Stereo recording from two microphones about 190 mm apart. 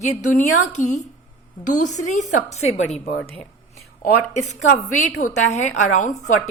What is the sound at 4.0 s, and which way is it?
A woman's voice, 40° left (ahead or behind).